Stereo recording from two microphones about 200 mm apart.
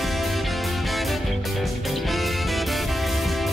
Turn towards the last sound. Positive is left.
turn(degrees=0)  # may be behind; listen again after turning